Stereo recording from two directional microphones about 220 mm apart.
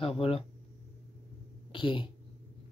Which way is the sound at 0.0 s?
25° left (ahead or behind).